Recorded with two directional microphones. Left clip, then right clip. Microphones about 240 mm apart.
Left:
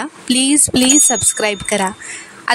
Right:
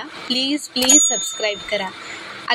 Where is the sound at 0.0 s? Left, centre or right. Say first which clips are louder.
Left 4 dB; left.